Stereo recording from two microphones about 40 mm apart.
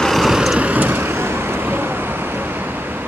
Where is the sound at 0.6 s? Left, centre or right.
Right.